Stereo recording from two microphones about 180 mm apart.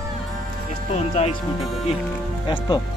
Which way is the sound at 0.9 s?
35° left (ahead or behind).